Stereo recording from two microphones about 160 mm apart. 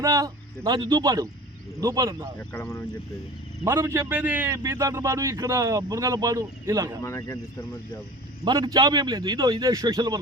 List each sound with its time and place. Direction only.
0.0 s a man's voice: 20° right (ahead or behind)
2.5 s speech: 15° left (ahead or behind)
3.6 s a man's voice: 20° right (ahead or behind)
7.0 s speech: 20° left (ahead or behind)
8.4 s speech: 25° right (ahead or behind)